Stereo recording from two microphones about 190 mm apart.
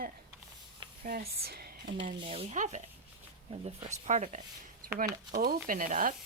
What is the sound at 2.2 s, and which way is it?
Speech, 30° right (ahead or behind).